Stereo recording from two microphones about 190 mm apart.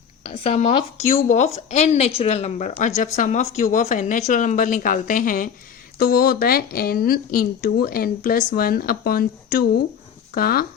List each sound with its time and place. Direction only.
0.3 s a woman's voice: 35° left (ahead or behind); by 10.7 s 50° left (ahead or behind)